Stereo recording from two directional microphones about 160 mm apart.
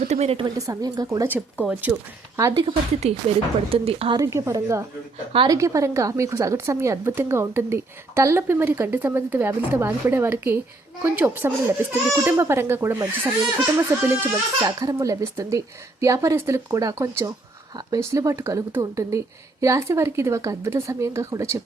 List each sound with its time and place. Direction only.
0.0 s a woman's voice: 45° right (ahead or behind)
0.4 s speech: 20° right (ahead or behind)
1.6 s a woman's voice: 10° right (ahead or behind)
2.6 s a woman's voice: 35° right (ahead or behind)
4.2 s a woman's voice: 20° right (ahead or behind)